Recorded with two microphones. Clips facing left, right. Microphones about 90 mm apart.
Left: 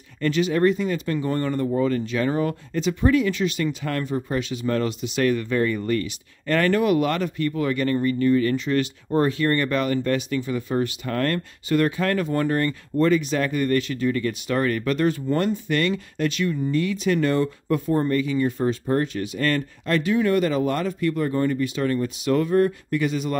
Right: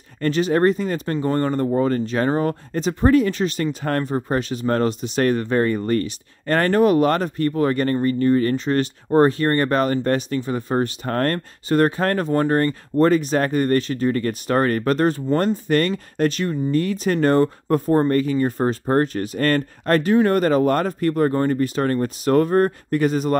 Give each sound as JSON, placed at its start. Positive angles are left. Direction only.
{"t": 0.2, "sound": "speech", "side_deg": -40}